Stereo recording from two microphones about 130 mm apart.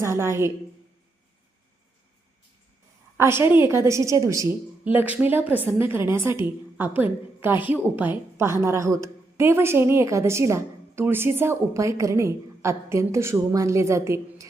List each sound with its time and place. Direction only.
0.0 s a woman's voice: 20° right (ahead or behind)
3.2 s a woman's voice: 20° right (ahead or behind)
4.9 s a woman's voice: 10° right (ahead or behind)